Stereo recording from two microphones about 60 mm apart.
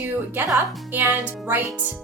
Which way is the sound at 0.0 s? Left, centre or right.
Right.